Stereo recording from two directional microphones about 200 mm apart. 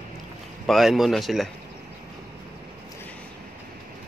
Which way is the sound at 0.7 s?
Centre (ahead or behind).